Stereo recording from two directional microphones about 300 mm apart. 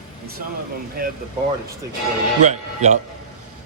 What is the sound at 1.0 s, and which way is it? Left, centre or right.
Speech, right.